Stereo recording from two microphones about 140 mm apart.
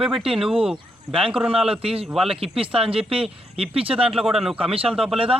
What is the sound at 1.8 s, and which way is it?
Speech, 45° right (ahead or behind).